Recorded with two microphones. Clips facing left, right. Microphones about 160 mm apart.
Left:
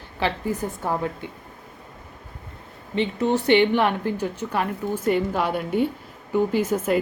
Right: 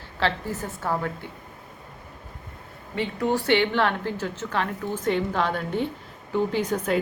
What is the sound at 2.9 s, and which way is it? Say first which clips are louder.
A woman's voice: left 3 dB; 20° left (ahead or behind).